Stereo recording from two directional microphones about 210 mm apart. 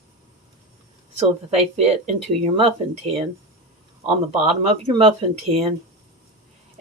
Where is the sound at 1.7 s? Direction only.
30° right (ahead or behind).